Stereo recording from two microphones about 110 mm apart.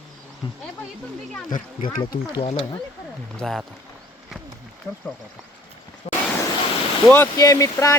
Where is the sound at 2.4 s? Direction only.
60° left (ahead or behind).